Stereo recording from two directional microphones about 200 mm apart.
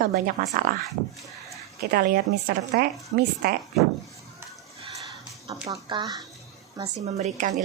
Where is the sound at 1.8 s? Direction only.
45° right (ahead or behind).